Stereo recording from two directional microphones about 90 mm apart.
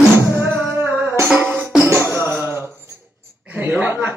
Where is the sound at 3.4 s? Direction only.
25° right (ahead or behind).